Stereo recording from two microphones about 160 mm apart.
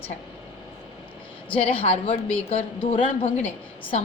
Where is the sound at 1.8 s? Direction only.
40° left (ahead or behind).